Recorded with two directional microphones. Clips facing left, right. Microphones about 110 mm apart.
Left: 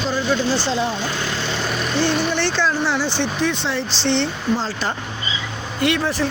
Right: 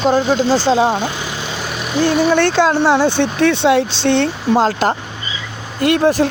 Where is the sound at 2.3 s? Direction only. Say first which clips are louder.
Right 8 dB; 50° right (ahead or behind).